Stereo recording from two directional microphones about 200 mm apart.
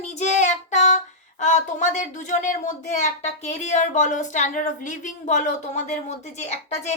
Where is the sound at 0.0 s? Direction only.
35° left (ahead or behind).